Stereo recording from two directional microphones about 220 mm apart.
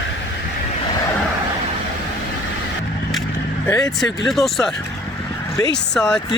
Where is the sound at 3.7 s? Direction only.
15° left (ahead or behind).